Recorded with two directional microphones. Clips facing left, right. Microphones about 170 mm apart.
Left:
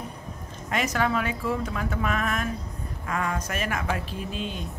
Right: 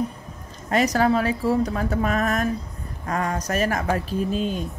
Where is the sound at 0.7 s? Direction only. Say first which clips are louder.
Right 6 dB; 40° right (ahead or behind).